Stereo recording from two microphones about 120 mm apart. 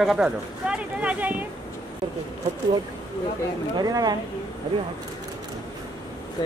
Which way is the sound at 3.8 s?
35° right (ahead or behind).